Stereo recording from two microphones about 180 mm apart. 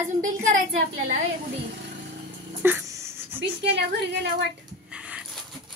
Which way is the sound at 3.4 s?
75° right (ahead or behind).